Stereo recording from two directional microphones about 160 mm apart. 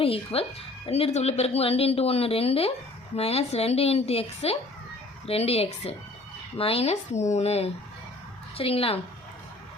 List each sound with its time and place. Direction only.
0.0 s speech: 35° left (ahead or behind)